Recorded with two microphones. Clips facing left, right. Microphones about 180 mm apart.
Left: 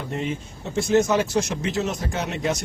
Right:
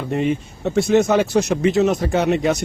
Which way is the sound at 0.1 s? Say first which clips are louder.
Right 10 dB; 60° right (ahead or behind).